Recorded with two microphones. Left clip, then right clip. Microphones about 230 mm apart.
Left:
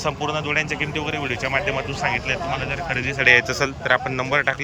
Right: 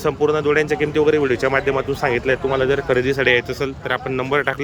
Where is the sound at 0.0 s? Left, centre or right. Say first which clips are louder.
Right 6 dB; centre.